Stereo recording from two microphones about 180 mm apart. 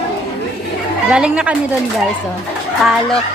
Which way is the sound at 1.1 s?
5° right (ahead or behind).